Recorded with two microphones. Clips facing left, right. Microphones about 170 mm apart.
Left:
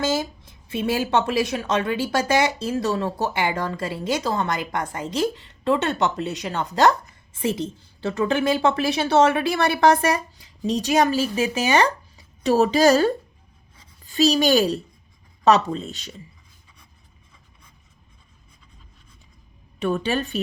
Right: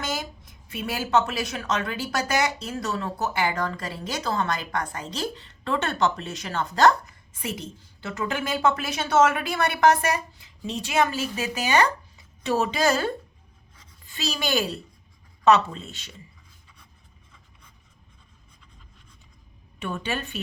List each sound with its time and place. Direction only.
0.0 s a woman's voice: 25° left (ahead or behind)
13.7 s a sound: 40° left (ahead or behind)
15.4 s a woman's voice: 35° left (ahead or behind)
19.8 s a woman's voice: 35° left (ahead or behind)